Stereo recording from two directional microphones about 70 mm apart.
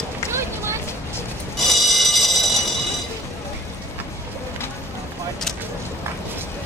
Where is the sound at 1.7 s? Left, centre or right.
Centre.